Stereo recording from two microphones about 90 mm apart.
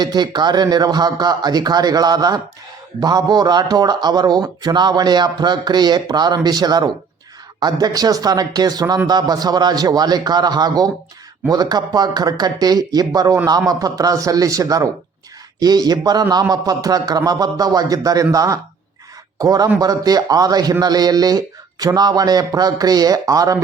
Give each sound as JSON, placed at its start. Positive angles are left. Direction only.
{"t": 0.0, "sound": "a man's voice", "side_deg": -55}